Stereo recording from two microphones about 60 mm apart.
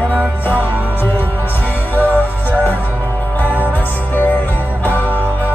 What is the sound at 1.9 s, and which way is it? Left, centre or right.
Music, right.